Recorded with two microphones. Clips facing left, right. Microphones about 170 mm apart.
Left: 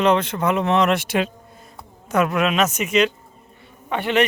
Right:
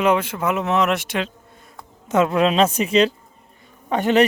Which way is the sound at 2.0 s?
25° right (ahead or behind).